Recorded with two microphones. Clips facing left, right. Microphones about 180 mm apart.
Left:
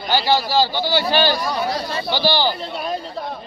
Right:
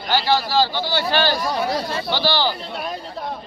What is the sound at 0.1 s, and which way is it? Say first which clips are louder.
A man's voice: left 1 dB; 10° left (ahead or behind).